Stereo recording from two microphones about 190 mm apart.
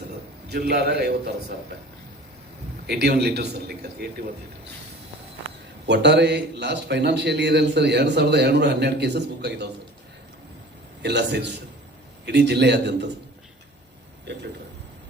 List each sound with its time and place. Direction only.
0.4 s a man's voice: 60° right (ahead or behind)
2.8 s a man's voice: 60° right (ahead or behind)
5.8 s a man's voice: 65° right (ahead or behind)
11.0 s a man's voice: 65° right (ahead or behind)